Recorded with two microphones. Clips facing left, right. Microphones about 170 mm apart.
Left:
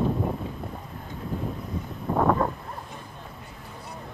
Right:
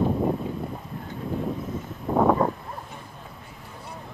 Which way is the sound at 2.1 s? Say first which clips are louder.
Right 3 dB; 20° right (ahead or behind).